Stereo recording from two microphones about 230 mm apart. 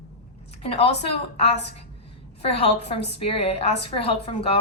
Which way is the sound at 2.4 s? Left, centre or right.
Left.